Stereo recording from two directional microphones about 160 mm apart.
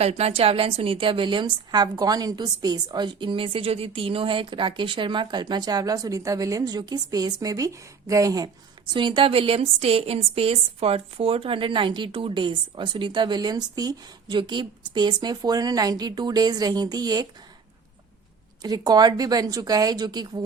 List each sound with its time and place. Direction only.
0.0 s a woman's voice: 40° right (ahead or behind); by 17.2 s 25° right (ahead or behind)
18.6 s a woman's voice: 25° right (ahead or behind)